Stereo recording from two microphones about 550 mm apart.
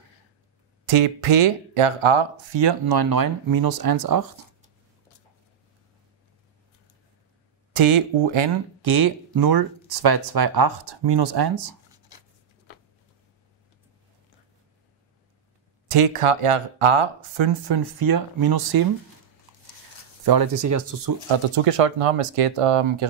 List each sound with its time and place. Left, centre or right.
0.8 s speech: right
7.7 s speech: right
15.9 s speech: right
20.2 s speech: right
21.3 s speech: right